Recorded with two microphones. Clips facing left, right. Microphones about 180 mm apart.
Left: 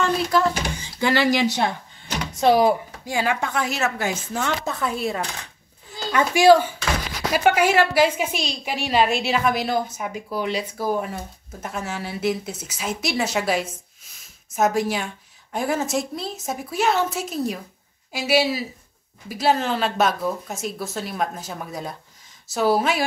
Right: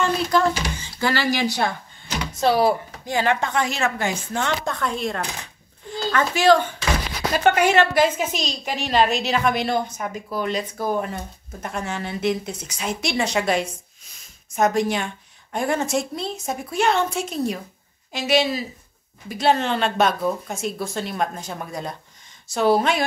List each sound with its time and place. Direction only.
0.7 s a woman's voice: 15° left (ahead or behind)